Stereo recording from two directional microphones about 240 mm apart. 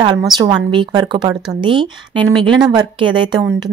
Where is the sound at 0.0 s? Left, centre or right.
Centre.